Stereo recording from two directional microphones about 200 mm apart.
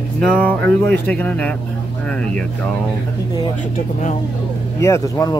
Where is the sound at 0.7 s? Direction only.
5° left (ahead or behind).